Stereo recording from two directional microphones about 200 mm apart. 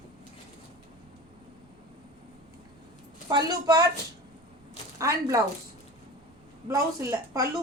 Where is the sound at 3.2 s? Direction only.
20° right (ahead or behind).